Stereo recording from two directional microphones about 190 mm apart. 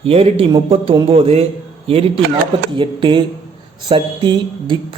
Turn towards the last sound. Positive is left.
turn(degrees=-25)  # may be behind; listen again after turning